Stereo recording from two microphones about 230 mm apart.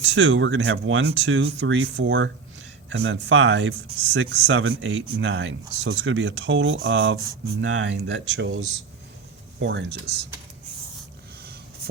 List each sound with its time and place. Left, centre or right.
0.1 s speech: right